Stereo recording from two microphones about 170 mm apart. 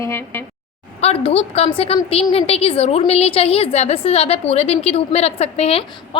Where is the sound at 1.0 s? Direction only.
35° left (ahead or behind).